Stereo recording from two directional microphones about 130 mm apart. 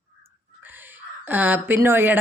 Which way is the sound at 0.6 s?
15° right (ahead or behind).